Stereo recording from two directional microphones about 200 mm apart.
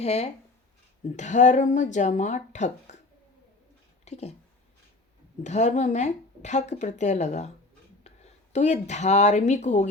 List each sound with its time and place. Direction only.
0.0 s speech: 30° left (ahead or behind)
4.0 s a sound: 35° left (ahead or behind)
5.4 s speech: 35° left (ahead or behind)